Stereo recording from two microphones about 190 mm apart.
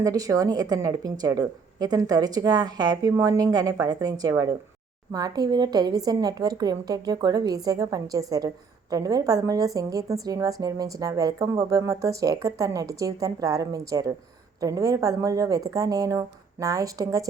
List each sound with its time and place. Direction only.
0.0 s a woman's voice: 20° right (ahead or behind)